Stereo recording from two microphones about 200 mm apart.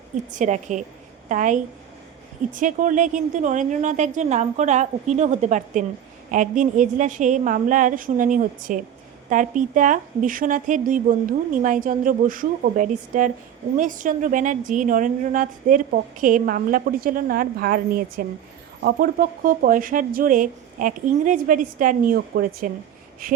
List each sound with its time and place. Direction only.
0.3 s a woman's voice: 40° right (ahead or behind)